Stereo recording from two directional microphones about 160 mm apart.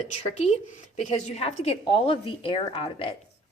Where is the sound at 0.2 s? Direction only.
40° left (ahead or behind).